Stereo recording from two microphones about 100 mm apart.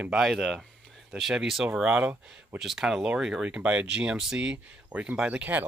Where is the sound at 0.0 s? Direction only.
5° right (ahead or behind).